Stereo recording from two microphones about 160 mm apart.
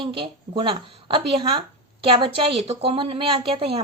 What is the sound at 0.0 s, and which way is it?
A woman's voice, 35° right (ahead or behind).